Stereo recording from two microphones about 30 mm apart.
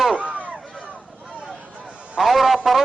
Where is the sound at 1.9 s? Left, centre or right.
Right.